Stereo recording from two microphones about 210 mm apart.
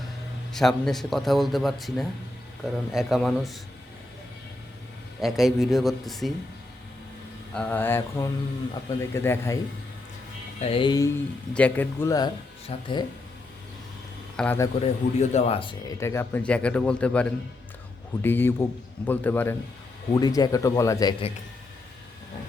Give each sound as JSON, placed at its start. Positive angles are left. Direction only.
{"t": 0.5, "sound": "a man's voice", "side_deg": 0}
{"t": 5.2, "sound": "a man's voice", "side_deg": 0}
{"t": 7.5, "sound": "speech", "side_deg": 5}
{"t": 10.6, "sound": "speech", "side_deg": 25}
{"t": 11.5, "sound": "speech", "side_deg": 10}
{"t": 14.3, "sound": "speech", "side_deg": 10}
{"t": 14.8, "sound": "speech", "side_deg": 30}
{"t": 16.0, "sound": "a man's voice", "side_deg": 15}